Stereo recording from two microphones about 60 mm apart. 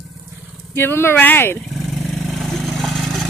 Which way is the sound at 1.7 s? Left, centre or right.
Centre.